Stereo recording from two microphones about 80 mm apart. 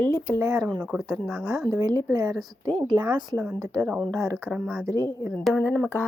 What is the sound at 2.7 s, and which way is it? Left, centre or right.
Speech, right.